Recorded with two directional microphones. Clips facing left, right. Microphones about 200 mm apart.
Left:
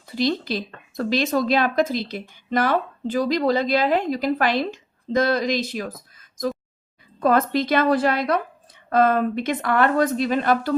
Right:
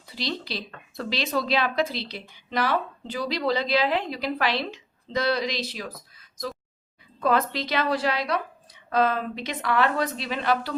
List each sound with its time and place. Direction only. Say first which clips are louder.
0.1 s speech: left 9 dB; 50° left (ahead or behind)